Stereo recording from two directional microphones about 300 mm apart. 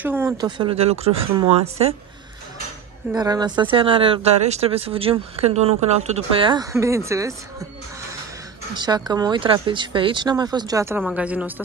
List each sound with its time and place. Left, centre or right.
0.0 s speech: centre
3.1 s speech: centre
8.7 s speech: centre